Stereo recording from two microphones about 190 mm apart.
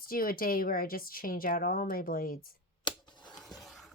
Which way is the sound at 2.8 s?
25° left (ahead or behind).